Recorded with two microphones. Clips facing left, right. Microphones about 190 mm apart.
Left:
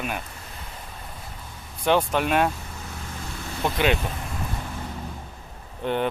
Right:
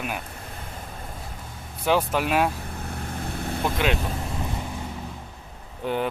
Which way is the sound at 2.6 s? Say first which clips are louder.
Right 4 dB; 60° right (ahead or behind).